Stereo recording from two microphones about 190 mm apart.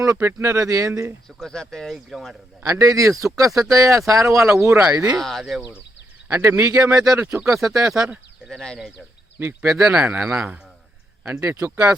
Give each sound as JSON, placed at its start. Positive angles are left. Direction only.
{"t": 0.0, "sound": "speech", "side_deg": -15}
{"t": 1.4, "sound": "speech", "side_deg": 5}
{"t": 2.6, "sound": "speech", "side_deg": -15}
{"t": 4.8, "sound": "speech", "side_deg": -5}
{"t": 7.0, "sound": "speech", "side_deg": 0}
{"t": 9.4, "sound": "speech", "side_deg": -10}